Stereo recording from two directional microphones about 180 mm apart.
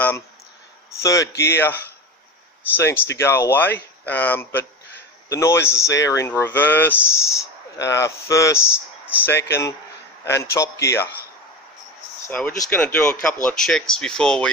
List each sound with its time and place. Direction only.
0.9 s speech: 15° left (ahead or behind)
12.3 s speech: 10° left (ahead or behind)